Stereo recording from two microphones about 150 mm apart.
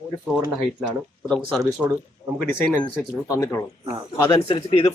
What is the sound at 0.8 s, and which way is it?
Speech, 5° right (ahead or behind).